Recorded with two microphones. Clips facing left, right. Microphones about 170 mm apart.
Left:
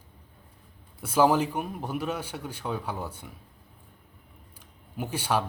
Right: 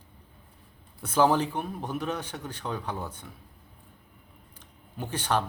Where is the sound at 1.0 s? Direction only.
10° left (ahead or behind).